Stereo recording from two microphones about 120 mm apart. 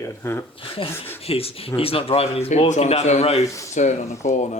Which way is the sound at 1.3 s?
50° left (ahead or behind).